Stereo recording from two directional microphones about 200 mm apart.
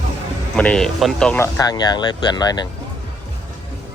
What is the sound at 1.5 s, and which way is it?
Speech, 20° left (ahead or behind).